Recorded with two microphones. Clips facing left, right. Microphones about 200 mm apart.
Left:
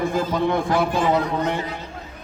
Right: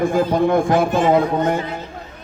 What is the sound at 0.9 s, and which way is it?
Speech, 25° right (ahead or behind).